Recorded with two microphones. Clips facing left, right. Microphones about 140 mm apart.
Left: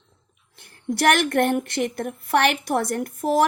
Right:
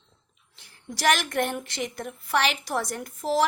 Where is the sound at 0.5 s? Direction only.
55° left (ahead or behind).